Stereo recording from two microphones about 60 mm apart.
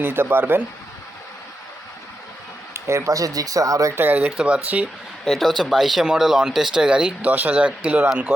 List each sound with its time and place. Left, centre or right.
0.0 s speech: right
2.7 s speech: right
3.9 s speech: right
4.3 s speech: centre
5.2 s speech: centre
7.3 s speech: right